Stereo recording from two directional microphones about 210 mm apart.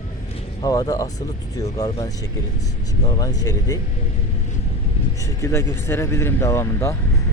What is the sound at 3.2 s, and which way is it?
Speech, 15° left (ahead or behind).